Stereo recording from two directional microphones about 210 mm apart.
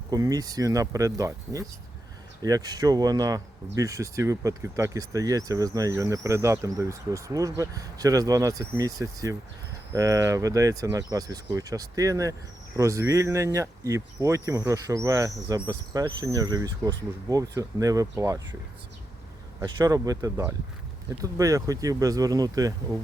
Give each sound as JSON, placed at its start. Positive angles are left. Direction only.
{"t": 0.1, "sound": "speech", "side_deg": -15}
{"t": 19.6, "sound": "speech", "side_deg": -15}